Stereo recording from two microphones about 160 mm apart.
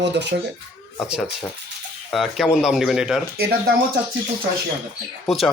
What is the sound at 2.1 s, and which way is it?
A man's voice, centre (ahead or behind).